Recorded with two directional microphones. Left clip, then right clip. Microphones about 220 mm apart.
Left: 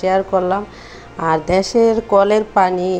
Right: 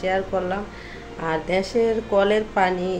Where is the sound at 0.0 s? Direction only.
25° left (ahead or behind).